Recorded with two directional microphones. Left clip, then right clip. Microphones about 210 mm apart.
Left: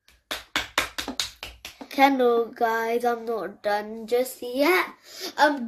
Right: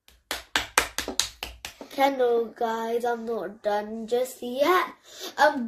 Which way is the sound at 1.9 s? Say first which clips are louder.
Left 3 dB; 40° left (ahead or behind).